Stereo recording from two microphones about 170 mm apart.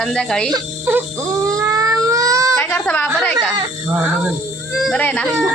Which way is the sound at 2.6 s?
10° left (ahead or behind).